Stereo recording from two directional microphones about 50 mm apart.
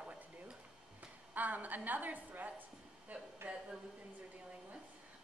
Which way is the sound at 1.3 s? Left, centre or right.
Right.